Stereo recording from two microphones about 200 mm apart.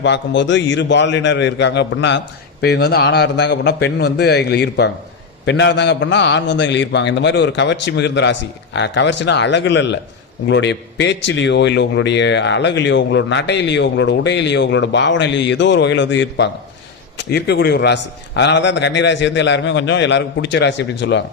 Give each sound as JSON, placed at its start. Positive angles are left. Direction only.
{"t": 0.0, "sound": "a man's voice", "side_deg": 60}